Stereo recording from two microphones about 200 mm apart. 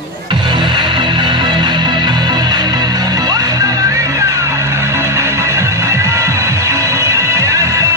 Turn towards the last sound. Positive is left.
turn(degrees=-15)  # may be behind; listen again after turning